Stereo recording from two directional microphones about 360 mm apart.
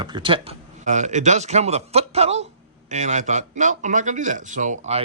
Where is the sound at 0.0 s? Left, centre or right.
Centre.